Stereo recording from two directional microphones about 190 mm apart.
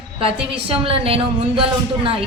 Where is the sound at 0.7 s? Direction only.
30° right (ahead or behind).